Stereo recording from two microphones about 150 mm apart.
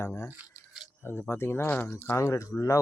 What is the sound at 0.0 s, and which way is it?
Rattle, 15° left (ahead or behind).